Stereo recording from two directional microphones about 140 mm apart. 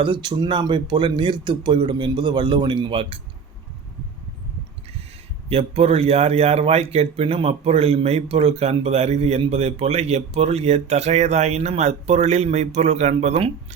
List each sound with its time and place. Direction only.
0.0 s a man's voice: 35° right (ahead or behind)
5.5 s a man's voice: 45° right (ahead or behind)